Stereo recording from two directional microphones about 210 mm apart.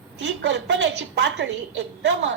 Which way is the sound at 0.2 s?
55° right (ahead or behind).